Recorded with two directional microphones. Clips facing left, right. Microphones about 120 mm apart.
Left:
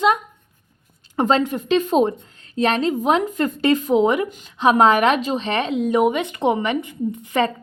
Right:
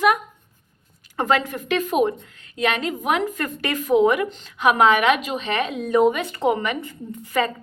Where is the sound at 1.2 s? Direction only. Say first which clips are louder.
Left 3 dB; 20° left (ahead or behind).